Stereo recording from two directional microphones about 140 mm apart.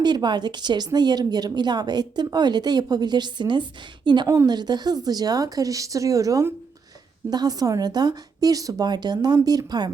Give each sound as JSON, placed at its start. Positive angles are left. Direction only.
{"t": 0.0, "sound": "a woman's voice", "side_deg": -30}